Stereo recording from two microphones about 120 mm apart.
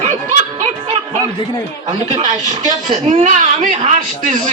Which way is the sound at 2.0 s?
85° right.